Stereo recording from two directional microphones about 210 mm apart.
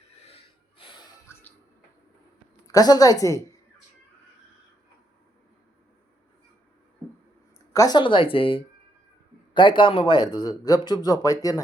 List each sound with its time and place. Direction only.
0.8 s a sound: 20° left (ahead or behind)
2.6 s a woman's voice: 15° left (ahead or behind)
7.7 s speech: 15° left (ahead or behind)